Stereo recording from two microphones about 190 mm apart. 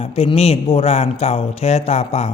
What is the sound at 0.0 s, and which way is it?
A man's voice, 30° left (ahead or behind).